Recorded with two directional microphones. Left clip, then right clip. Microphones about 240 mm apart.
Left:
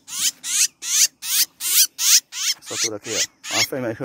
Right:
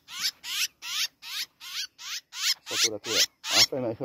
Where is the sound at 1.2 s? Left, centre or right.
Centre.